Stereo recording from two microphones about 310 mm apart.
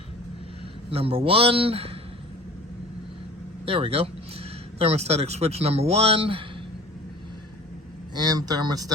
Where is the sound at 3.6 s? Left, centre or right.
Centre.